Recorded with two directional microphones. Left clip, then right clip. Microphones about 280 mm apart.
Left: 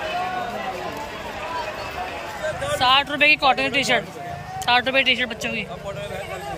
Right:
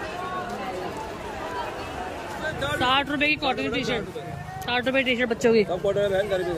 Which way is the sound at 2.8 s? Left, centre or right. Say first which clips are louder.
Left 6 dB; centre.